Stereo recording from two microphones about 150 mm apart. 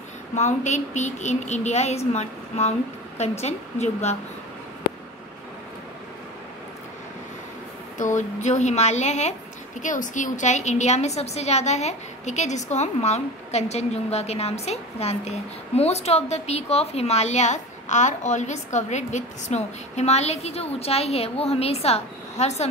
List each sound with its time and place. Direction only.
0.3 s a woman's voice: 50° left (ahead or behind)
8.0 s a woman's voice: 55° left (ahead or behind)